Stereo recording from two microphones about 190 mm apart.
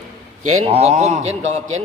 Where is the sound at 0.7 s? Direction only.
35° right (ahead or behind).